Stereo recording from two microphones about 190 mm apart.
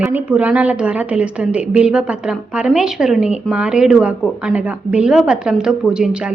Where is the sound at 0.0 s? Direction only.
5° right (ahead or behind).